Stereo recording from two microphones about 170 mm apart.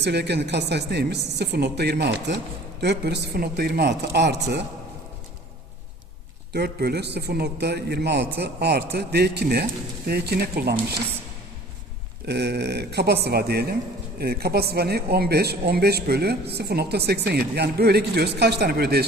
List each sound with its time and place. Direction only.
0.0 s a woman's voice: 85° right
6.5 s speech: 70° right (ahead or behind)
12.2 s speech: 80° right